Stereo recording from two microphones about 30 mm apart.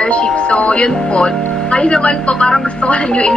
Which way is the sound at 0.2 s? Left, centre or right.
Left.